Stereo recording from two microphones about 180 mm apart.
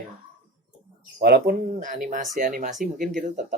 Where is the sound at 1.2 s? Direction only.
60° right (ahead or behind).